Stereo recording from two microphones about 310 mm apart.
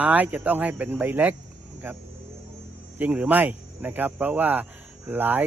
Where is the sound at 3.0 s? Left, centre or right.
Centre.